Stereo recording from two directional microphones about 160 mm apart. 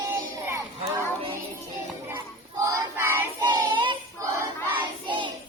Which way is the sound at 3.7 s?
30° right (ahead or behind).